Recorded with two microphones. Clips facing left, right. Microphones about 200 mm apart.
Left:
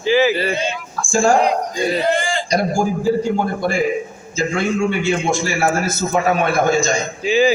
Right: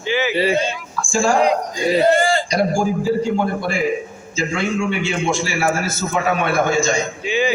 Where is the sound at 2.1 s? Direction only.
40° right (ahead or behind).